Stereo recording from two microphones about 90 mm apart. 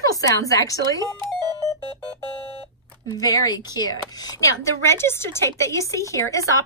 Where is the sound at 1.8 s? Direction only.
50° left (ahead or behind).